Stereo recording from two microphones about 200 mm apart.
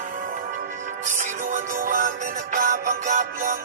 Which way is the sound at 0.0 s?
40° right (ahead or behind).